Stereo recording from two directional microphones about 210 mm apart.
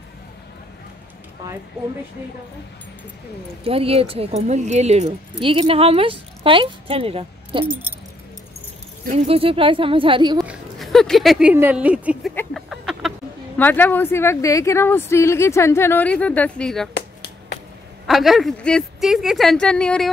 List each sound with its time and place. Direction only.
3.6 s speech: 25° right (ahead or behind)
9.0 s speech: 30° right (ahead or behind)
10.4 s speech: centre (ahead or behind)
12.4 s a sound: centre (ahead or behind)
13.6 s speech: 10° left (ahead or behind)
16.9 s finger snapping: 50° left (ahead or behind)
18.0 s speech: centre (ahead or behind)